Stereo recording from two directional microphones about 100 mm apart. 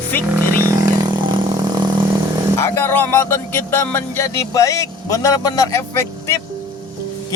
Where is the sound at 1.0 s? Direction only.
50° right (ahead or behind).